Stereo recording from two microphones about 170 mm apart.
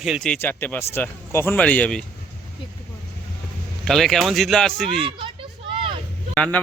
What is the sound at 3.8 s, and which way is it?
Speech, centre (ahead or behind).